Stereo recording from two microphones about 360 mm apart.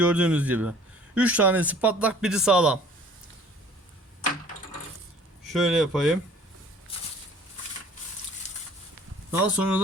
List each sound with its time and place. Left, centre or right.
0.0 s speech: centre
5.5 s speech: centre
9.4 s speech: centre